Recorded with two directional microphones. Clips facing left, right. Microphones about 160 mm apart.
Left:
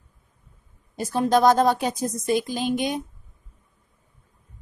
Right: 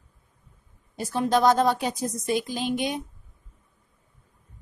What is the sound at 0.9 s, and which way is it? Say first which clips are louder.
A woman's voice: left 3 dB; 40° left (ahead or behind).